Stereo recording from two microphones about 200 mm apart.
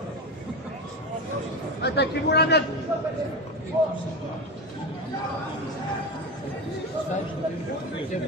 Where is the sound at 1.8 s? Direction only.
55° left (ahead or behind).